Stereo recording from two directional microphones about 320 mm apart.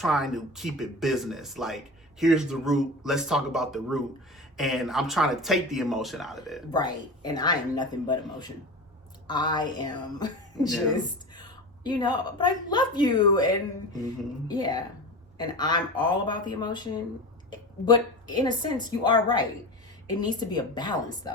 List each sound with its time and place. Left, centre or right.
0.0 s speech: centre
6.7 s a woman's voice: centre